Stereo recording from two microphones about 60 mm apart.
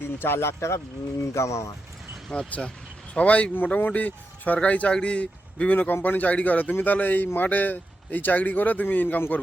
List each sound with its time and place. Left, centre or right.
0.0 s speech: left
2.3 s speech: centre